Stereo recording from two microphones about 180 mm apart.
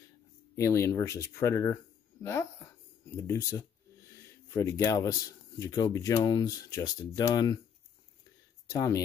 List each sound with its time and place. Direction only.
0.6 s speech: 15° left (ahead or behind)
4.1 s a sound: 15° left (ahead or behind)
5.6 s speech: 20° left (ahead or behind)
8.6 s speech: 20° left (ahead or behind)